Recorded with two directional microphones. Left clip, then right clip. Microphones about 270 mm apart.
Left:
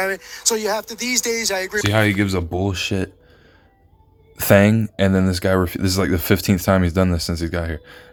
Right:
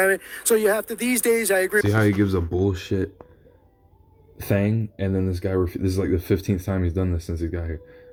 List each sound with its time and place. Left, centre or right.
0.0 s speech: centre
4.4 s speech: left